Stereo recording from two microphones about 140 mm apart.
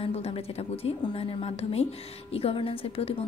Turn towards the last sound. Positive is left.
turn(degrees=45)  # may be behind; listen again after turning